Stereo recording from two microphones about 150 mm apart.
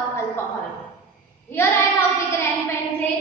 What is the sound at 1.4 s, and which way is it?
Speech, 15° left (ahead or behind).